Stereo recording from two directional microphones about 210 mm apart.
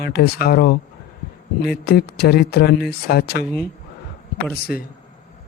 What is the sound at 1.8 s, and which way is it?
Speech, 50° left (ahead or behind).